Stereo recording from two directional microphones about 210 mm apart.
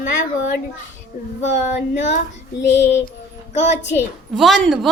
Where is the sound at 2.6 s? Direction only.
55° left (ahead or behind).